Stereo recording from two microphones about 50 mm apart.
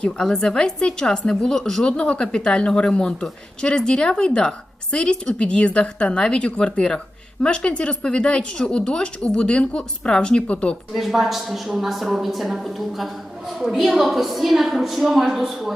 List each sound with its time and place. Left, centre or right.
0.0 s a woman's voice: centre
1.8 s a woman's voice: left
10.9 s a woman's voice: centre